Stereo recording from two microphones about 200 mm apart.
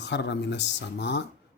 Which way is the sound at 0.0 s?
60° left (ahead or behind).